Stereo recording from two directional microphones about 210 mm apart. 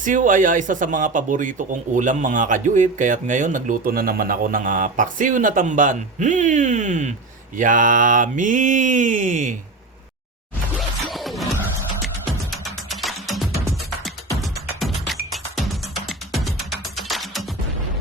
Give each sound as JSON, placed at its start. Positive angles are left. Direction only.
{"t": 0.0, "sound": "speech", "side_deg": -40}
{"t": 11.1, "sound": "music", "side_deg": 0}
{"t": 12.5, "sound": "music", "side_deg": 0}